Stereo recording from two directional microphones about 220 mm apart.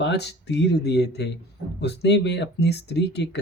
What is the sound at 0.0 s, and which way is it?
Speech, 50° left (ahead or behind).